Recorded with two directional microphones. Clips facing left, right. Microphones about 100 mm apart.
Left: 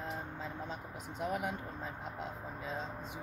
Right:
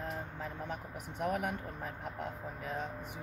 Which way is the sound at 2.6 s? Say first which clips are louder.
Right 2 dB; 20° left (ahead or behind).